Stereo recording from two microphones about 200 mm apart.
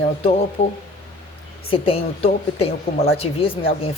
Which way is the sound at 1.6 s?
30° left (ahead or behind).